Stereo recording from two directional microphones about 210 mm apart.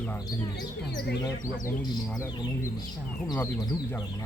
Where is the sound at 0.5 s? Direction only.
55° left (ahead or behind).